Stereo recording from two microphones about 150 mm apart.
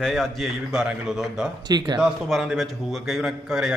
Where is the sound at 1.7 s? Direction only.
30° right (ahead or behind).